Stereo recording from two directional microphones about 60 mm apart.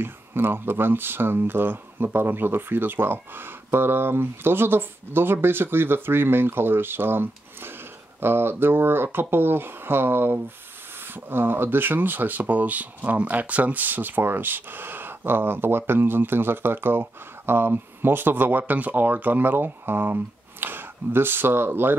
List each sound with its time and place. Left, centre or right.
0.0 s speech: right